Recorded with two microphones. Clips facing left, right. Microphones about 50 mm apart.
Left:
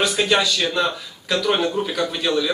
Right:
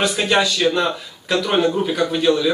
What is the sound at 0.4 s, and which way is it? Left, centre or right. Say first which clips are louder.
Speech: right 3 dB; right.